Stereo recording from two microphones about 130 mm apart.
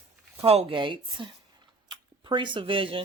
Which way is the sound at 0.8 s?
40° right (ahead or behind).